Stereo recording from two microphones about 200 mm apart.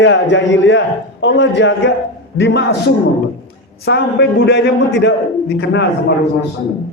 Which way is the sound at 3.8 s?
60° left (ahead or behind).